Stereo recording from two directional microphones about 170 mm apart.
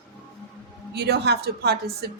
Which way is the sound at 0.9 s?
75° right (ahead or behind).